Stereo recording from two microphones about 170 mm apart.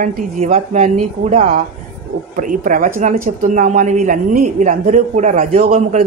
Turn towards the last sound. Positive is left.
turn(degrees=-40)  # may be behind; listen again after turning